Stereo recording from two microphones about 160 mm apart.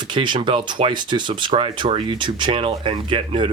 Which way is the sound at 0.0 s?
30° right (ahead or behind).